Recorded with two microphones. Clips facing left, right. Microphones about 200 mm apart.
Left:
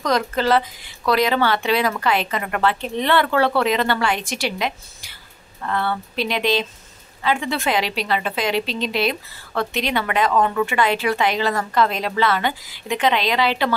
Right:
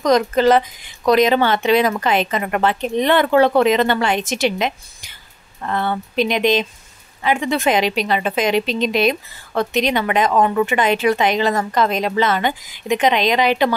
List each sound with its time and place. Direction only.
0.0 s a woman's voice: 20° right (ahead or behind)